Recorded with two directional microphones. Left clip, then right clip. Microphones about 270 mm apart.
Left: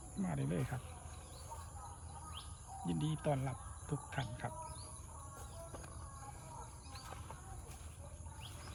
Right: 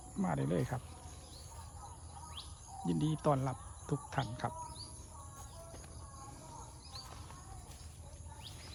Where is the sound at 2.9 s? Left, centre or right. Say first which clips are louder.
Right 6 dB; centre.